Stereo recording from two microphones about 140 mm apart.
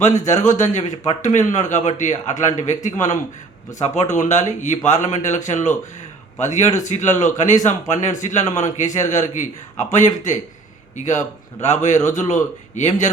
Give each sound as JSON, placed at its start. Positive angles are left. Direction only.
{"t": 0.0, "sound": "speech", "side_deg": 55}